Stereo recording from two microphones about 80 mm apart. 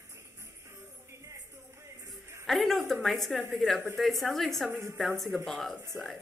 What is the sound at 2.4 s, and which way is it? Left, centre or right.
A woman's voice, centre.